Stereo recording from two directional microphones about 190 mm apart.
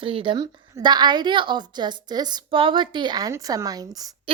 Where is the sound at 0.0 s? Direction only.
25° right (ahead or behind).